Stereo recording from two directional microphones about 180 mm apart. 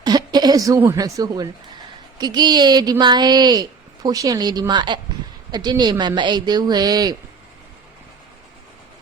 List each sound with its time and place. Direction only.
0.0 s a woman's voice: 20° right (ahead or behind)